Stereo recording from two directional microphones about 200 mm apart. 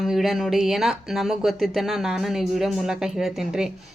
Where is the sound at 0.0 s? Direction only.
Centre (ahead or behind).